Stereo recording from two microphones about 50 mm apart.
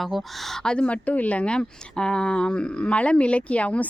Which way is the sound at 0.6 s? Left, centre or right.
Centre.